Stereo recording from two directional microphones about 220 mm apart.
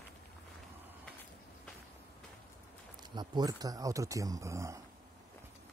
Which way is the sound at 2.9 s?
20° right (ahead or behind).